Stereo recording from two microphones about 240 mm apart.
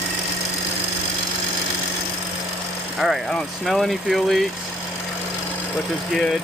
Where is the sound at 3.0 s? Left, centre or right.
Centre.